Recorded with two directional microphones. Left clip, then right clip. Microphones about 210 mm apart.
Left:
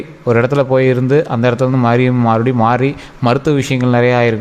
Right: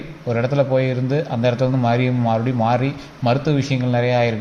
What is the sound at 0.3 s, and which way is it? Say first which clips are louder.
A man's voice: left 7 dB; 40° left (ahead or behind).